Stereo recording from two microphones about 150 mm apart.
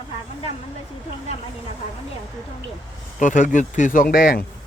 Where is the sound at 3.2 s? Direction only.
60° left (ahead or behind); by 4.5 s 75° left (ahead or behind).